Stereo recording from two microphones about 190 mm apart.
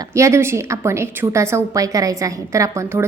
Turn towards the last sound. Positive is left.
turn(degrees=-15)  # may be behind; listen again after turning